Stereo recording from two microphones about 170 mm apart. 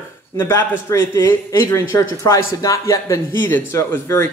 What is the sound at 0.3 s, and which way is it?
Speech, 15° left (ahead or behind).